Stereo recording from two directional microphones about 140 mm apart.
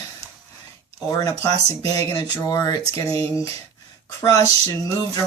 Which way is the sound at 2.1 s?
25° left (ahead or behind).